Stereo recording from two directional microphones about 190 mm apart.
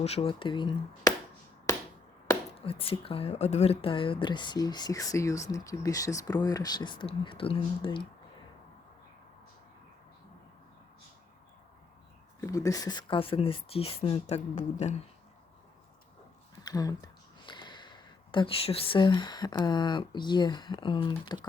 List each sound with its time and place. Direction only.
0.0 s a woman's voice: 30° left (ahead or behind)
2.6 s a woman's voice: 30° left (ahead or behind)
12.4 s a woman's voice: 15° left (ahead or behind); by 14.9 s 35° left (ahead or behind)
16.6 s speech: 20° left (ahead or behind)